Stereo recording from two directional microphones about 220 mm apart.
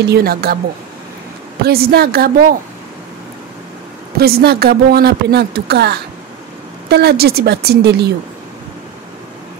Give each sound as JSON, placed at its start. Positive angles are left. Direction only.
{"t": 0.0, "sound": "speech", "side_deg": -45}
{"t": 1.6, "sound": "speech", "side_deg": -45}
{"t": 4.2, "sound": "speech", "side_deg": -45}